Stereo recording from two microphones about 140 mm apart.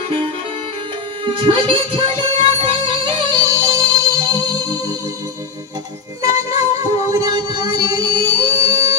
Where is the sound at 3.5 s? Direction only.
25° right (ahead or behind).